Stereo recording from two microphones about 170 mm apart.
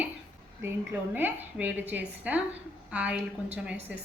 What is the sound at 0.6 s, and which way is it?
Speech, 10° right (ahead or behind).